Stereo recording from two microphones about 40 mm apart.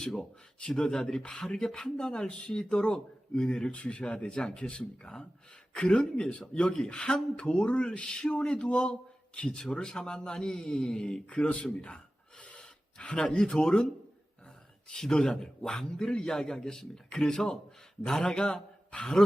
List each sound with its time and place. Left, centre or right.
0.7 s a man's voice: centre
3.6 s a man's voice: left
11.3 s gasp: left
13.2 s a man's voice: centre
14.9 s a man's voice: centre